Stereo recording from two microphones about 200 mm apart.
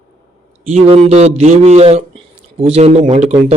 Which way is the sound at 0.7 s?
30° right (ahead or behind).